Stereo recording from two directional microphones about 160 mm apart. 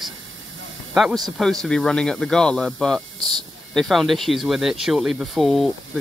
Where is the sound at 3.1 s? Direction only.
25° right (ahead or behind).